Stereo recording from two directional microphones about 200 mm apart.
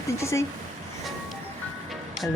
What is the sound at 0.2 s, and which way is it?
Speech, 15° left (ahead or behind).